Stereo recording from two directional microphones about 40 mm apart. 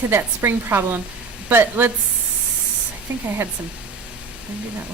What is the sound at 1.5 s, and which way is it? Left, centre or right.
Speech, right.